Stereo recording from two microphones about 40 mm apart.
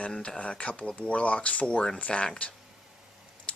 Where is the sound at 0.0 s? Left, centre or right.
Left.